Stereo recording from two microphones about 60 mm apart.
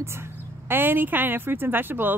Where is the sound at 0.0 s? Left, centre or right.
Right.